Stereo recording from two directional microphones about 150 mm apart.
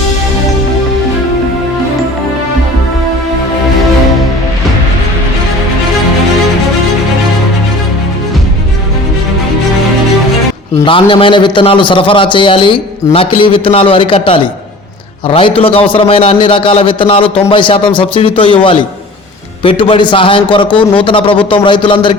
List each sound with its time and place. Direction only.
10.8 s a man's voice: 35° left (ahead or behind)